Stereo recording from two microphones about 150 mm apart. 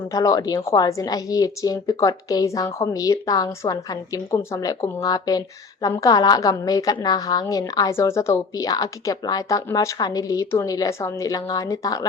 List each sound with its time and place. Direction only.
0.1 s a woman's voice: 25° left (ahead or behind)